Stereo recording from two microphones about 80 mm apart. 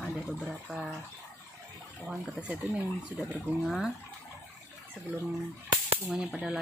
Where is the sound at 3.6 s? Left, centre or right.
Centre.